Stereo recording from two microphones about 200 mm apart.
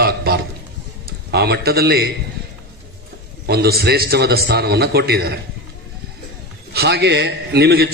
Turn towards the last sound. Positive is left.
turn(degrees=-55)  # may be behind; listen again after turning